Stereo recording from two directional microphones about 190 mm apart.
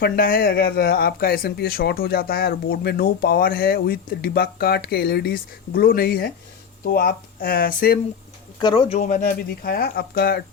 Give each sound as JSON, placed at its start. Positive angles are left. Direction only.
{"t": 0.0, "sound": "speech", "side_deg": 50}
{"t": 8.6, "sound": "speech", "side_deg": 25}
{"t": 9.0, "sound": "speech", "side_deg": 45}